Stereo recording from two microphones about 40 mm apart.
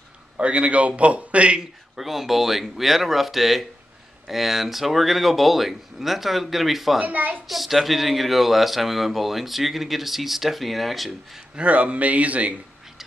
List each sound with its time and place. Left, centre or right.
0.4 s a man's voice: right
1.6 s speech: centre
7.0 s a woman's voice: right
7.4 s speech: centre
11.5 s a man's voice: right